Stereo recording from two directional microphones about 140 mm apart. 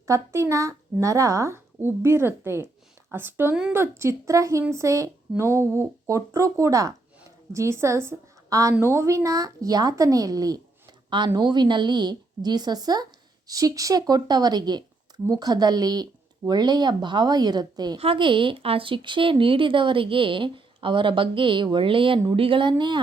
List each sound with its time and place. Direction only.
0.0 s a woman's voice: 20° right (ahead or behind); by 22.7 s 40° right (ahead or behind)